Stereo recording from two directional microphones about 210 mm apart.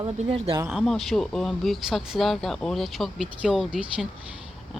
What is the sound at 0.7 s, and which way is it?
Speech, centre (ahead or behind).